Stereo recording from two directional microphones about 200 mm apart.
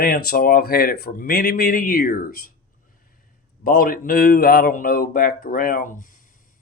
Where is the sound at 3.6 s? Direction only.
50° left (ahead or behind).